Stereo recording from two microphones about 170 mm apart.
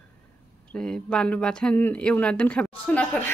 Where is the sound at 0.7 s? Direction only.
5° left (ahead or behind).